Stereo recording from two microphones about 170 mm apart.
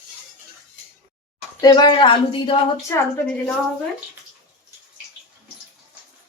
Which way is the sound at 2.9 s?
15° left (ahead or behind).